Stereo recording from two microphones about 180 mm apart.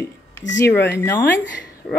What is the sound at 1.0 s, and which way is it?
Speech, 15° left (ahead or behind).